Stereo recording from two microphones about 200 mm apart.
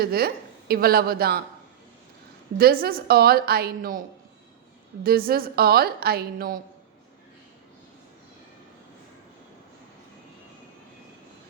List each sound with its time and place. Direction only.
0.0 s a woman's voice: 50° right (ahead or behind)
2.6 s a woman's voice: 50° right (ahead or behind)
5.0 s a woman's voice: 50° right (ahead or behind)